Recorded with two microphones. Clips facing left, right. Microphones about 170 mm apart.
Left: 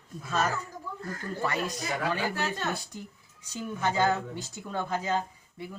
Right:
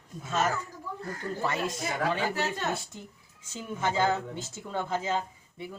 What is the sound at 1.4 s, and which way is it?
Speech, 25° right (ahead or behind).